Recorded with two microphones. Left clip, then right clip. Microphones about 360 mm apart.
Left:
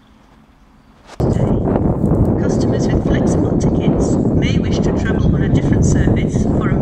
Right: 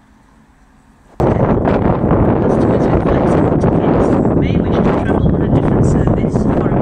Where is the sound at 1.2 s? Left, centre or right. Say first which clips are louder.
Right 5 dB; right.